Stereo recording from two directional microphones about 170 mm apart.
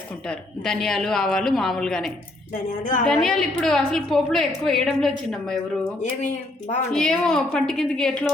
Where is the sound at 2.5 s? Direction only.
50° left (ahead or behind).